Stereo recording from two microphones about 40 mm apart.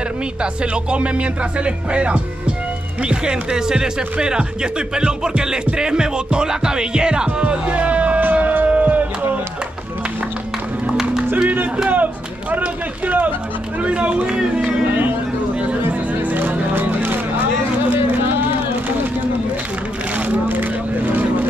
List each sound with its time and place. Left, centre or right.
0.4 s speech: right
8.2 s a sound: right
11.4 s music: right
11.9 s speech: right
13.7 s speech: right
14.9 s a sound: right
15.9 s music: right
20.4 s vehicle: right